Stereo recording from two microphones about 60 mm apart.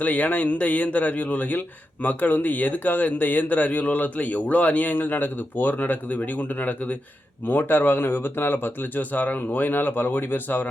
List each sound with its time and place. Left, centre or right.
0.0 s speech: left